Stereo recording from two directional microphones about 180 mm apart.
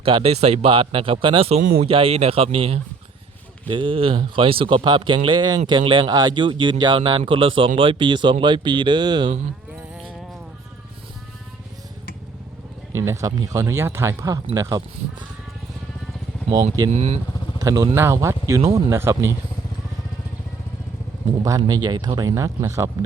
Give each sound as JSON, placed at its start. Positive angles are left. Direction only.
{"t": 0.0, "sound": "speech", "side_deg": -30}
{"t": 13.0, "sound": "speech", "side_deg": -15}
{"t": 16.9, "sound": "speech", "side_deg": -35}
{"t": 17.6, "sound": "speech", "side_deg": -20}
{"t": 21.4, "sound": "speech", "side_deg": -20}